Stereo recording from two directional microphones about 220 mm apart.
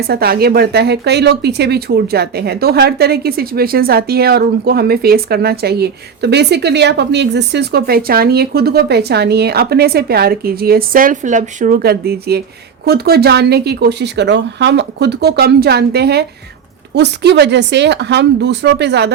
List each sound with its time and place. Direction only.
0.1 s speech: 45° right (ahead or behind)